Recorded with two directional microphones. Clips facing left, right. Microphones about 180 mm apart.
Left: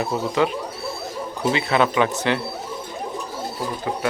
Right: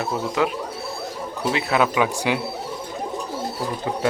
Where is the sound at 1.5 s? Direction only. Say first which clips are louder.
Even; 5° right (ahead or behind).